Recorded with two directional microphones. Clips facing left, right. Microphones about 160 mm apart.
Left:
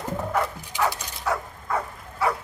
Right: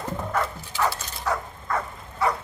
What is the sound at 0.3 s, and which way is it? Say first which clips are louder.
Dog: left 1 dB; 15° left (ahead or behind).